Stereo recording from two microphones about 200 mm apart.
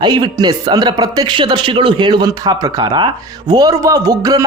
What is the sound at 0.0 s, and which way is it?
Speech, 20° right (ahead or behind).